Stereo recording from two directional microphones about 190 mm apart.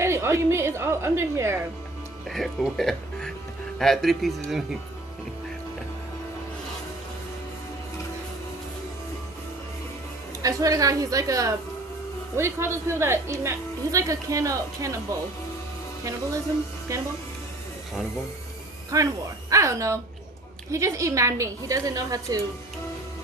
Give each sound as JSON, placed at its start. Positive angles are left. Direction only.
{"t": 0.0, "sound": "a woman's voice", "side_deg": -15}
{"t": 2.2, "sound": "speech", "side_deg": 0}
{"t": 10.4, "sound": "a woman's voice", "side_deg": -15}
{"t": 16.9, "sound": "a woman's voice", "side_deg": -15}
{"t": 18.9, "sound": "a woman's voice", "side_deg": -20}